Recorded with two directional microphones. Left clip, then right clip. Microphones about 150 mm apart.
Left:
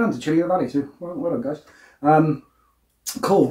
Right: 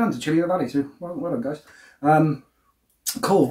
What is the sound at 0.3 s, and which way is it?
Speech, 25° right (ahead or behind).